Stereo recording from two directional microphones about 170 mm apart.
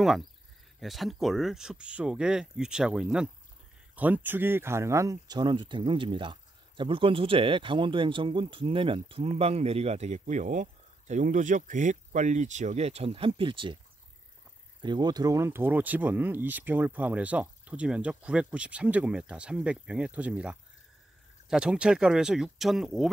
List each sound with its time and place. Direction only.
0.7 s speech: centre (ahead or behind); by 13.7 s 30° right (ahead or behind)
14.8 s speech: 25° right (ahead or behind); by 23.0 s centre (ahead or behind)